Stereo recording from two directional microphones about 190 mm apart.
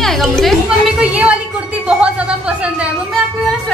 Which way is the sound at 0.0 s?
Centre (ahead or behind).